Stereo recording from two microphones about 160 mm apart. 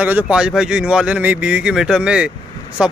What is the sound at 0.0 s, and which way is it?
Speech, 5° right (ahead or behind).